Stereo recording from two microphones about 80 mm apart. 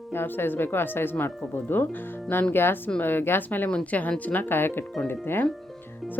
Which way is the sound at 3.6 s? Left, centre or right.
Centre.